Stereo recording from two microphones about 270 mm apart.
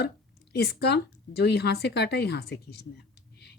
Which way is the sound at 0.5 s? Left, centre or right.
Left.